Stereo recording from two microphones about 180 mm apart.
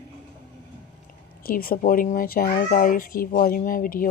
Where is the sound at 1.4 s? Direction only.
55° left (ahead or behind).